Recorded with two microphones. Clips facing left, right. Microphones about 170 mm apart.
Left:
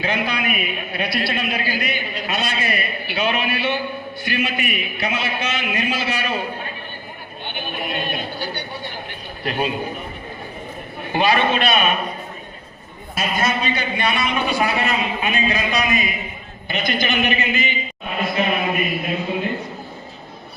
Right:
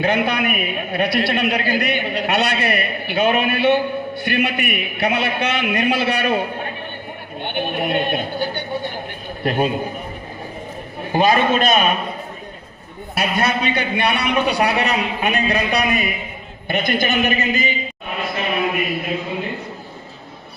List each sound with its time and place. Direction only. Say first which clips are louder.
0.0 s a man's voice: right 4 dB; 55° right (ahead or behind)
11.1 s a man's voice: right 2 dB; 40° right (ahead or behind)
13.1 s a man's voice: right 2 dB; 65° right (ahead or behind); by 17.7 s 40° right (ahead or behind)